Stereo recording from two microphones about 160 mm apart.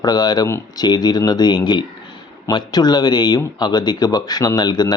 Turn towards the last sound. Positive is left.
turn(degrees=25)  # may be behind; listen again after turning